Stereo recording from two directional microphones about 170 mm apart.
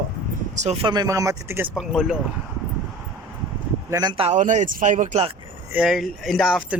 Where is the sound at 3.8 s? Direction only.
20° right (ahead or behind).